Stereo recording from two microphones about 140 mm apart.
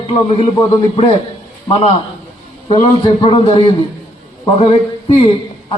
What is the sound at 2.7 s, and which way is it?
A man's voice, 40° left (ahead or behind).